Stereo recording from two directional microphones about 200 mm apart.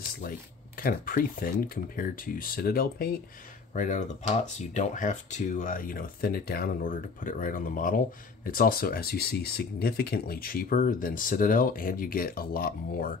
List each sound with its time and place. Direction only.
0.7 s speech: 45° left (ahead or behind)